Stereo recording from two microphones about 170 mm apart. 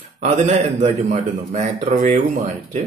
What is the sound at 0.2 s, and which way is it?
A man's voice, 40° right (ahead or behind).